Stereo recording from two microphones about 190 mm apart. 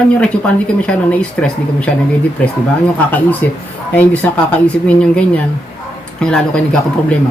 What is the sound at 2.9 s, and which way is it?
Speech, 10° left (ahead or behind).